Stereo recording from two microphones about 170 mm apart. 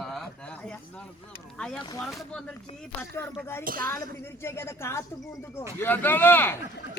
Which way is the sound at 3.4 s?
15° left (ahead or behind).